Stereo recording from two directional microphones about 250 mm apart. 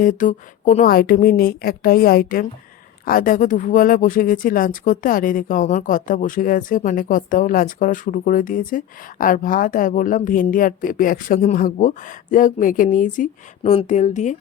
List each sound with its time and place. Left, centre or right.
0.0 s speech: left